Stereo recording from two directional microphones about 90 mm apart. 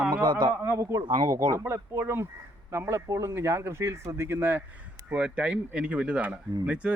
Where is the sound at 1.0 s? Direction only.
65° right (ahead or behind).